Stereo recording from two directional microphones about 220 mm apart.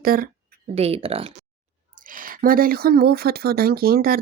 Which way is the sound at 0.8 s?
25° right (ahead or behind).